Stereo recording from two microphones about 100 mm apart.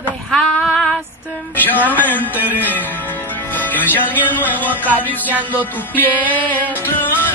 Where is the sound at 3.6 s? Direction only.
20° left (ahead or behind).